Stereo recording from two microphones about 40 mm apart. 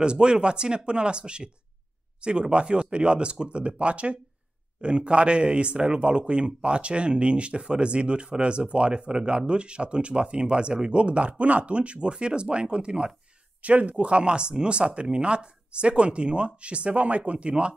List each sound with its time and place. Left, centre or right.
0.0 s speech: right
13.6 s speech: right